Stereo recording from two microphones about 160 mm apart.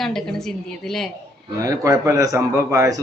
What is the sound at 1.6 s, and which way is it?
A man's voice, 20° right (ahead or behind).